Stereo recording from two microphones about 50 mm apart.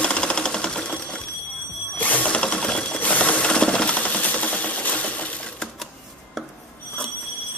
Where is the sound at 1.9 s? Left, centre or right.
Left.